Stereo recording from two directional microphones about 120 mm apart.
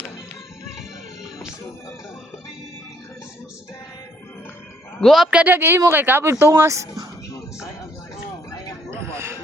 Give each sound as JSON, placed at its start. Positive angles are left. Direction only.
{"t": 4.9, "sound": "speech", "side_deg": 0}
{"t": 8.9, "sound": "music", "side_deg": -20}